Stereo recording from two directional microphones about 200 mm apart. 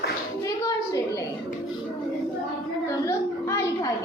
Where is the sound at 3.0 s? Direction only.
15° left (ahead or behind).